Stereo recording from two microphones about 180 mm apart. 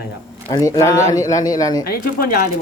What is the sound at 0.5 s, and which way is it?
Speech, 15° left (ahead or behind).